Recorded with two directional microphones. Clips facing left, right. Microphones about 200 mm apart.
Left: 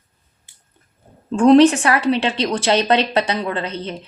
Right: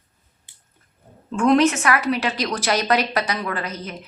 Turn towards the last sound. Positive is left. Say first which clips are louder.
# left 4 dB
turn(degrees=30)  # may be behind; listen again after turning